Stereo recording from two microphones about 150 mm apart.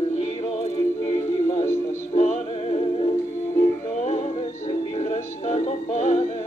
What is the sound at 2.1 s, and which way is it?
Music, 45° left (ahead or behind).